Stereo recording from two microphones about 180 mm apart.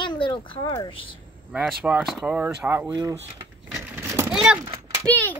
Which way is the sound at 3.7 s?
10° right (ahead or behind).